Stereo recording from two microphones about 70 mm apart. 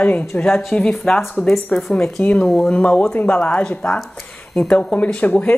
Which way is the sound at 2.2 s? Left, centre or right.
Centre.